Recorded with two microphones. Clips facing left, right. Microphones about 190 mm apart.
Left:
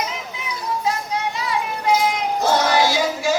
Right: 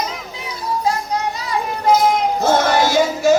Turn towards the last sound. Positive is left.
turn(degrees=-45)  # may be behind; listen again after turning